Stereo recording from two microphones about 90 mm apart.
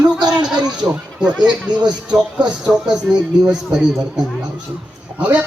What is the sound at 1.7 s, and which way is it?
Speech, 55° right (ahead or behind).